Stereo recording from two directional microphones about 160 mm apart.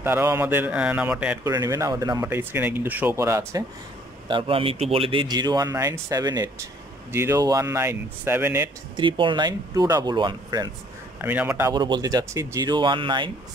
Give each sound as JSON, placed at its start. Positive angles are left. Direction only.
{"t": 0.0, "sound": "speech", "side_deg": -15}
{"t": 1.5, "sound": "speech", "side_deg": -20}
{"t": 4.3, "sound": "speech", "side_deg": -35}
{"t": 8.9, "sound": "speech", "side_deg": -30}
{"t": 11.1, "sound": "speech", "side_deg": -15}